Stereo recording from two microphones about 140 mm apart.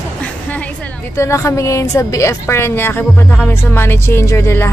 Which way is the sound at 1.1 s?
20° left (ahead or behind).